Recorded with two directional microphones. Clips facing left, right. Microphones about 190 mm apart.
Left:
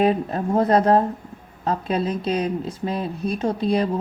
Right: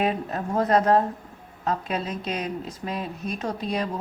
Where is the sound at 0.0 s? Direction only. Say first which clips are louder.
Left 6 dB; 30° left (ahead or behind).